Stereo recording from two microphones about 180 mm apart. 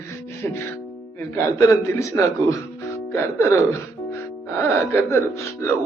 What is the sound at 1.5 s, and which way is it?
A woman's voice, 15° left (ahead or behind).